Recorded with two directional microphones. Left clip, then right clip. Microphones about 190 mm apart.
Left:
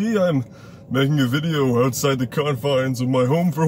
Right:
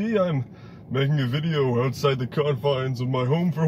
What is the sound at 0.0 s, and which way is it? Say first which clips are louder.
A man's voice: left 4 dB; 15° left (ahead or behind).